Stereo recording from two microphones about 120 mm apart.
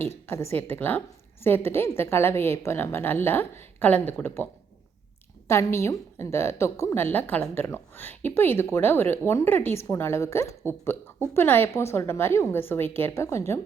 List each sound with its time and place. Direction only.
0.3 s a woman's voice: 20° left (ahead or behind)
5.5 s a woman's voice: 20° left (ahead or behind)